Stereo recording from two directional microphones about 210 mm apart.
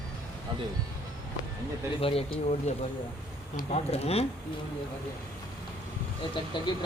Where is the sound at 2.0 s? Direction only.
25° left (ahead or behind).